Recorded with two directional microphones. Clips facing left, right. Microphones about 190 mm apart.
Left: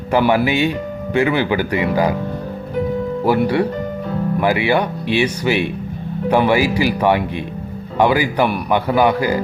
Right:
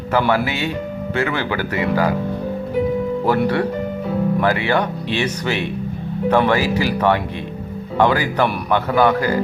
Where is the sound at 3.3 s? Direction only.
10° left (ahead or behind).